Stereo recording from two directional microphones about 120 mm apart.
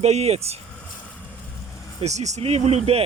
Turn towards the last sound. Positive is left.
turn(degrees=-60)  # may be behind; listen again after turning